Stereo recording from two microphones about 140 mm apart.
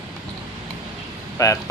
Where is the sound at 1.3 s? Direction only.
20° left (ahead or behind).